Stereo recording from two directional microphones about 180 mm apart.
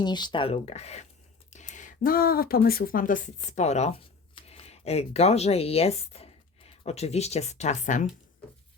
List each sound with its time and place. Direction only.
0.0 s speech: 25° left (ahead or behind); by 8.0 s 45° left (ahead or behind)